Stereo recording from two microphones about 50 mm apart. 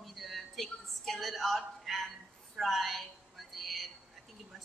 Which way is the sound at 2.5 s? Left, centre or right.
Centre.